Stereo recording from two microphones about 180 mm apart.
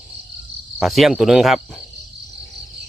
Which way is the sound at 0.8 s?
Centre (ahead or behind).